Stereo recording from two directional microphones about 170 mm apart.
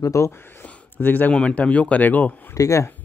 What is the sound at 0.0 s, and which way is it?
Speech, 20° left (ahead or behind).